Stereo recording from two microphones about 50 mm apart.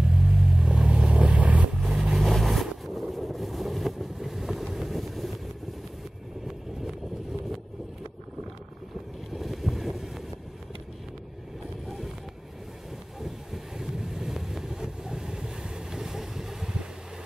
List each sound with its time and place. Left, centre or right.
0.3 s vehicle: centre
1.8 s vehicle: centre
9.3 s boat: centre
13.2 s vehicle: centre